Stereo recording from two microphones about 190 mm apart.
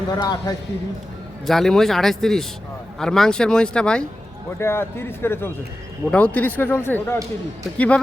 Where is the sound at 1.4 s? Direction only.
Centre (ahead or behind).